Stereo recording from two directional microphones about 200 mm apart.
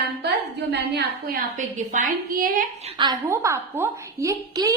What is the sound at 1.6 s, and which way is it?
A woman's voice, 40° right (ahead or behind).